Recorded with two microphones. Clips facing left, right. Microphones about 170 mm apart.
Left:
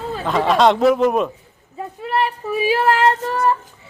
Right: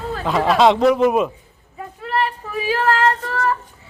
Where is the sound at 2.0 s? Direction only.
15° left (ahead or behind).